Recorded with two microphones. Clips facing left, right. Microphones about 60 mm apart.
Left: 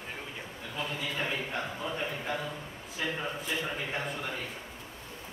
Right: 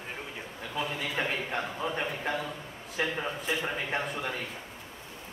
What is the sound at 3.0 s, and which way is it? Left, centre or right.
Speech, right.